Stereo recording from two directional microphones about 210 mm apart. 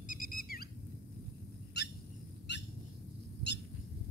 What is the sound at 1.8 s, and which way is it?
Bird, 55° left (ahead or behind).